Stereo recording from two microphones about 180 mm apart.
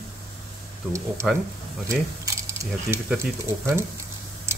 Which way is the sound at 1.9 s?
15° right (ahead or behind).